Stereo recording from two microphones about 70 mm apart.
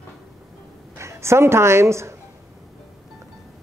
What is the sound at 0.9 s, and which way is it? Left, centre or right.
A woman's voice, right.